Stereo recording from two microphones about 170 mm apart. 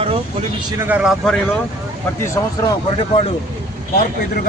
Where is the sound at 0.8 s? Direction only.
10° right (ahead or behind).